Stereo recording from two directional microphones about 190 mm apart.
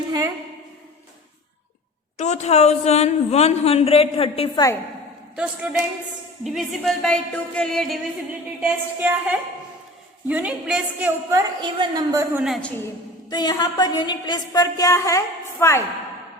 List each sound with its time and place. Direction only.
2.1 s speech: 35° left (ahead or behind)
5.6 s a woman's voice: 5° right (ahead or behind)
8.3 s a woman's voice: 10° right (ahead or behind)
11.3 s a woman's voice: 20° right (ahead or behind)
12.4 s a woman's voice: centre (ahead or behind)
13.3 s a woman's voice: 20° left (ahead or behind)